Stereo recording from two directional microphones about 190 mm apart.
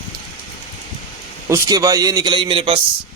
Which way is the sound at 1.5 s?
20° right (ahead or behind).